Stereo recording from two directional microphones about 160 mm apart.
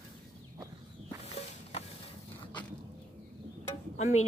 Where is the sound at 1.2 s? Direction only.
40° left (ahead or behind).